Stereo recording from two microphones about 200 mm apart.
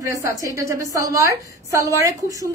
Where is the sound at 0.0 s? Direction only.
15° right (ahead or behind).